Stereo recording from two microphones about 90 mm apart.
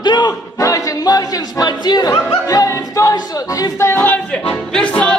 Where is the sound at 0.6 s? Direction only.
40° left (ahead or behind).